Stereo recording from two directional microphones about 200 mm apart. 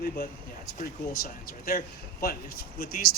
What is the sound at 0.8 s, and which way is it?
Speech, 45° left (ahead or behind).